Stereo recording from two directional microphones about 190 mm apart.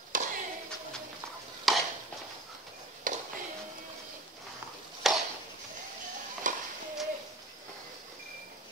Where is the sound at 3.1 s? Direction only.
45° right (ahead or behind).